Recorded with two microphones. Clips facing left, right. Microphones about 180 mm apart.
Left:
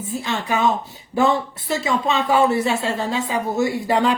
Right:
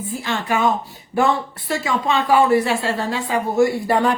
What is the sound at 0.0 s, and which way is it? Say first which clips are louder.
Speech: even; 20° left (ahead or behind).